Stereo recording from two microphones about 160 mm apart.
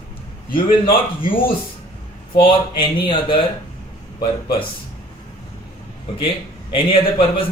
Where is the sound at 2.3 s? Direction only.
30° left (ahead or behind).